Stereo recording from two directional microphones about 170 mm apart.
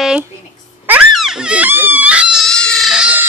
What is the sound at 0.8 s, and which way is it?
Screaming, 5° right (ahead or behind).